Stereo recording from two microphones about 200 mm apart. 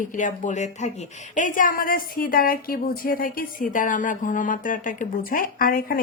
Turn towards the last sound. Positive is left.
turn(degrees=45)  # may be behind; listen again after turning